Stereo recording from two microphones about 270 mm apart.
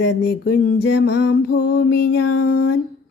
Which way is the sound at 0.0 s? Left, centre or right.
Left.